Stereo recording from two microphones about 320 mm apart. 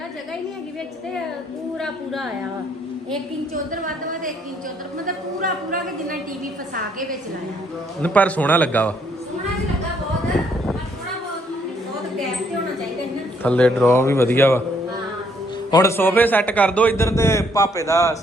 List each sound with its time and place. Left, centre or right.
1.8 s a man's voice: centre
3.7 s speech: right
8.0 s a man's voice: centre
13.4 s a man's voice: centre
15.7 s a man's voice: centre